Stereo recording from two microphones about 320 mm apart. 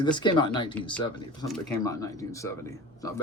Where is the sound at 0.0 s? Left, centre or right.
Centre.